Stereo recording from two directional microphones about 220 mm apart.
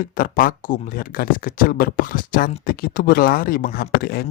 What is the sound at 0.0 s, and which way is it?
Speech, 40° left (ahead or behind).